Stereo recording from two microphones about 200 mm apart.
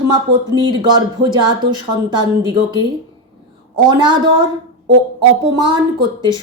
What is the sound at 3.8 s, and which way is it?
Speech, 20° right (ahead or behind).